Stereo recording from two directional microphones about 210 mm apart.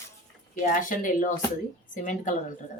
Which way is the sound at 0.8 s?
40° left (ahead or behind).